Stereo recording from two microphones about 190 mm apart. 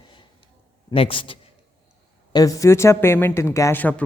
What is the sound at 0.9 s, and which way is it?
Speech, 30° left (ahead or behind).